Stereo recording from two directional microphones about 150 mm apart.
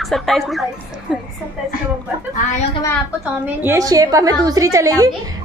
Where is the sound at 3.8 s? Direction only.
25° right (ahead or behind).